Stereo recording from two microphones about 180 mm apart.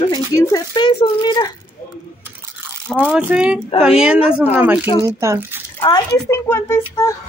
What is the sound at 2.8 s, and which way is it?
Speech, 10° right (ahead or behind).